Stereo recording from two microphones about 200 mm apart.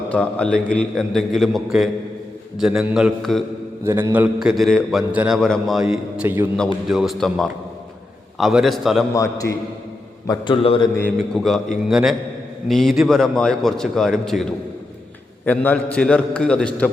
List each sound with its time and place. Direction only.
0.1 s a man's voice: 5° left (ahead or behind)
3.8 s a man's voice: 10° right (ahead or behind)
9.1 s a man's voice: 15° left (ahead or behind)
10.9 s a man's voice: 5° left (ahead or behind)
15.4 s a man's voice: 5° left (ahead or behind)